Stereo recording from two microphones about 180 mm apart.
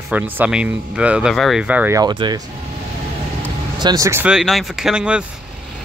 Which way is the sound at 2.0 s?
25° right (ahead or behind).